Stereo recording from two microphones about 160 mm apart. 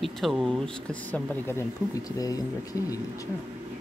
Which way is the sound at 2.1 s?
20° left (ahead or behind).